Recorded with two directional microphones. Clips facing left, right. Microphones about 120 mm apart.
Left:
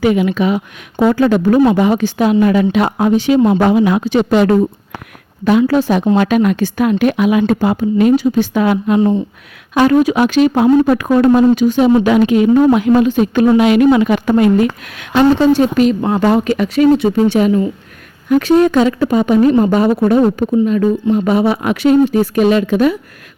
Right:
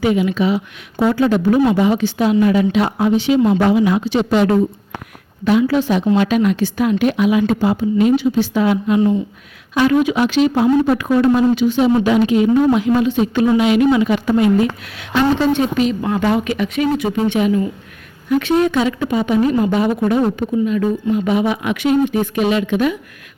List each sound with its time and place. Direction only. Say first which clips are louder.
0.0 s speech: left 3 dB; 60° left (ahead or behind)
5.5 s a woman's voice: left 3 dB; 50° left (ahead or behind)
9.0 s speech: left 2 dB; 25° left (ahead or behind)
9.7 s speech: left 4 dB; 45° left (ahead or behind)
12.0 s a woman's voice: left 3 dB; 55° left (ahead or behind); by 23.0 s 40° left (ahead or behind)